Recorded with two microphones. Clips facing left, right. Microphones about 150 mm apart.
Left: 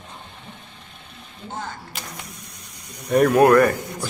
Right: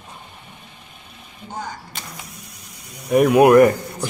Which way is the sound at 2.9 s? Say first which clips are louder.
Right 2 dB; centre (ahead or behind).